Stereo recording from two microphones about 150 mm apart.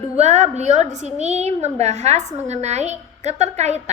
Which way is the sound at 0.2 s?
50° right (ahead or behind).